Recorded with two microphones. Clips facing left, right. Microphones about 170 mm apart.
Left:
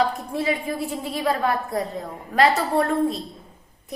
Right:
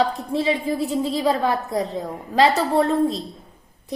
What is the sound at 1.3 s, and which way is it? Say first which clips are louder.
A woman's voice: left 2 dB; 20° right (ahead or behind).